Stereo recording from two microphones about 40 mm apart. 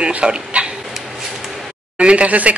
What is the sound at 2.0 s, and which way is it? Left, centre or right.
Speech, right.